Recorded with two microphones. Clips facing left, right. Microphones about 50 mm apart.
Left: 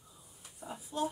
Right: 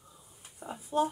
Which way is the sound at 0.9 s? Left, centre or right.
Right.